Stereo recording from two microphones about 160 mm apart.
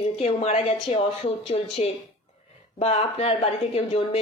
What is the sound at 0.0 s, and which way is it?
A woman's voice, 40° left (ahead or behind).